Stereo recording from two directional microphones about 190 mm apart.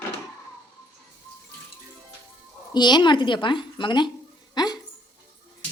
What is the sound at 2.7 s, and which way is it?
Speech, 25° left (ahead or behind).